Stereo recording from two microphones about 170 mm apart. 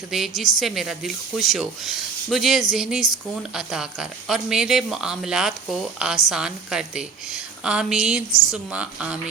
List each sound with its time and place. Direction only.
0.1 s speech: centre (ahead or behind)
8.3 s speech: 20° left (ahead or behind)
8.5 s speech: 5° right (ahead or behind)